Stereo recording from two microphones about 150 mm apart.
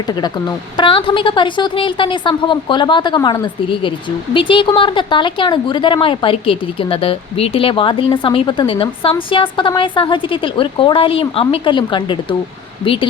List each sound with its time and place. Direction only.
0.8 s speech: 35° left (ahead or behind)